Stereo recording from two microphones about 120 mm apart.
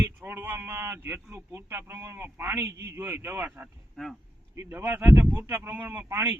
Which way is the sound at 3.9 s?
5° left (ahead or behind).